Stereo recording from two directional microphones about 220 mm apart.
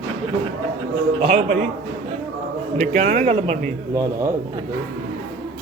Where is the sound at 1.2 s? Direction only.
30° right (ahead or behind).